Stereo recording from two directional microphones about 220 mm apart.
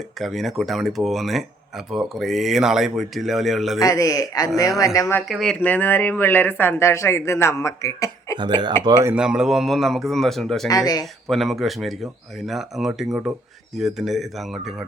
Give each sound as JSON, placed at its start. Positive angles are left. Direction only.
{"t": 0.2, "sound": "speech", "side_deg": 0}
{"t": 3.8, "sound": "speech", "side_deg": 15}
{"t": 5.3, "sound": "speech", "side_deg": 0}
{"t": 8.4, "sound": "speech", "side_deg": -20}
{"t": 9.1, "sound": "speech", "side_deg": -5}
{"t": 10.7, "sound": "speech", "side_deg": 15}
{"t": 11.3, "sound": "speech", "side_deg": 0}
{"t": 13.1, "sound": "speech", "side_deg": -10}
{"t": 13.7, "sound": "speech", "side_deg": 0}